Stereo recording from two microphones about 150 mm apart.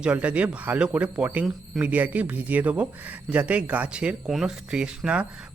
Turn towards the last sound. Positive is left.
turn(degrees=-5)  # may be behind; listen again after turning